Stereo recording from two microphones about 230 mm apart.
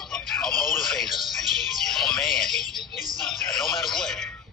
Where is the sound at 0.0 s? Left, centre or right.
Centre.